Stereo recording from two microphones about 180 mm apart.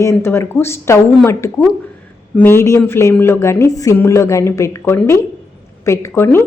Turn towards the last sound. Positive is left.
turn(degrees=15)  # may be behind; listen again after turning